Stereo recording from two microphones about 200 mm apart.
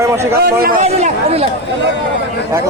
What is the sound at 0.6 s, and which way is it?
Speech, 35° right (ahead or behind).